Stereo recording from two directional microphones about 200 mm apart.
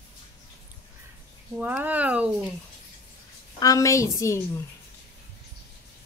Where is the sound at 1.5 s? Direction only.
10° right (ahead or behind).